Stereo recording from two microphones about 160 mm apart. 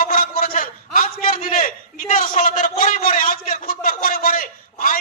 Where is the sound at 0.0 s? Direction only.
60° left (ahead or behind).